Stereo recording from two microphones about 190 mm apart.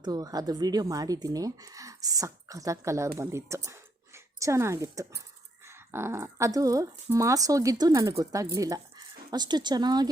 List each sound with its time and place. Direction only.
0.0 s speech: 20° right (ahead or behind)